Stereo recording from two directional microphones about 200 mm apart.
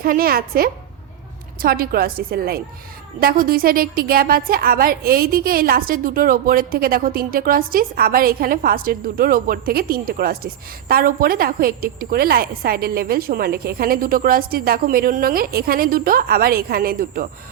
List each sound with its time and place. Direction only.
0.0 s a woman's voice: 45° right (ahead or behind)